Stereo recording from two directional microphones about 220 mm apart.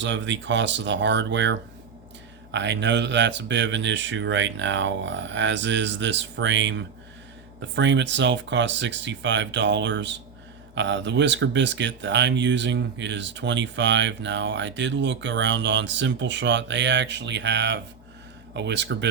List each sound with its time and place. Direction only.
0.0 s speech: 55° right (ahead or behind)